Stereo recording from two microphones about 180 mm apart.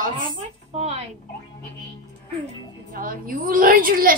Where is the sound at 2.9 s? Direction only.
50° right (ahead or behind).